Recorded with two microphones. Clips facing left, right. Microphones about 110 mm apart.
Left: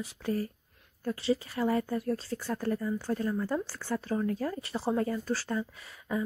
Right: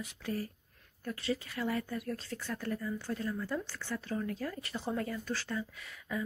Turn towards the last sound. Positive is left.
turn(degrees=30)  # may be behind; listen again after turning